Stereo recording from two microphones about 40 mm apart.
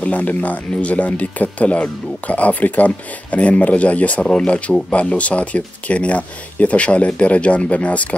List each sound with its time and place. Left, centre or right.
0.0 s speech: left
4.2 s speech: left
4.5 s speech: left